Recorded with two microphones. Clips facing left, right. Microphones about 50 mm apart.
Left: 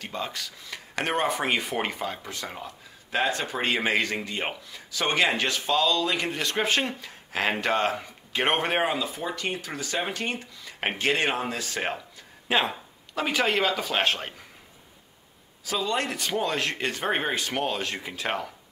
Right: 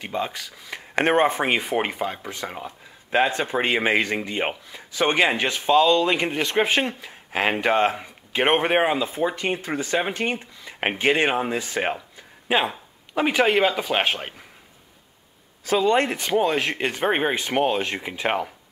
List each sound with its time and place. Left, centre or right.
0.0 s speech: centre
0.7 s speech: right; by 14.3 s centre
15.6 s speech: right